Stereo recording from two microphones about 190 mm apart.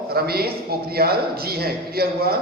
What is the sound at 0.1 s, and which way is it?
A man's voice, 55° right (ahead or behind).